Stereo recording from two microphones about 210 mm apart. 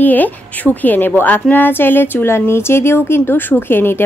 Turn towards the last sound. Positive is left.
turn(degrees=10)  # may be behind; listen again after turning